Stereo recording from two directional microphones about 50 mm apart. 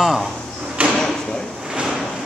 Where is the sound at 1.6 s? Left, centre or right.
Centre.